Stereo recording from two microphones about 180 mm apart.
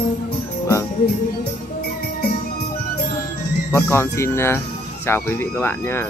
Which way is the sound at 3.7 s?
15° left (ahead or behind).